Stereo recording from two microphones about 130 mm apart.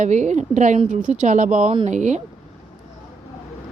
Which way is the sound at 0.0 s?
65° right (ahead or behind).